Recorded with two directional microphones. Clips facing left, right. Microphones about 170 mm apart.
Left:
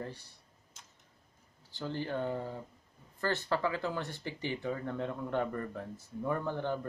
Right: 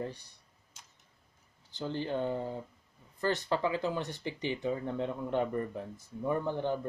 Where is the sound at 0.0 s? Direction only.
20° right (ahead or behind).